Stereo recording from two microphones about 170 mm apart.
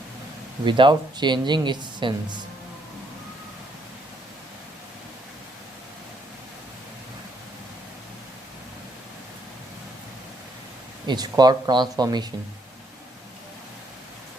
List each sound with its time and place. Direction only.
0.6 s speech: 25° right (ahead or behind)
11.0 s speech: 25° right (ahead or behind)